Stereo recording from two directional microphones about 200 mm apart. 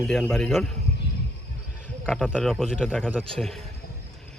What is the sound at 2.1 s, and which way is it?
A man's voice, centre (ahead or behind).